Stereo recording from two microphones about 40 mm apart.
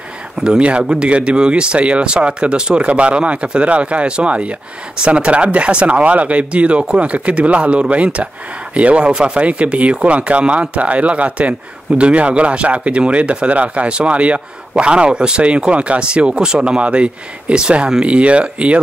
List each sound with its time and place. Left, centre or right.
0.4 s speech: right